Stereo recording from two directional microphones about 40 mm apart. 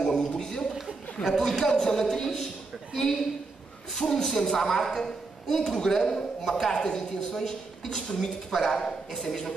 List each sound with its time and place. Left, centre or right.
0.0 s a sound: centre
1.2 s a woman's voice: centre
3.9 s a woman's voice: centre